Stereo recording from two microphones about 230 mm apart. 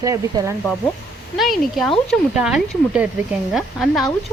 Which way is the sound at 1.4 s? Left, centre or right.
Centre.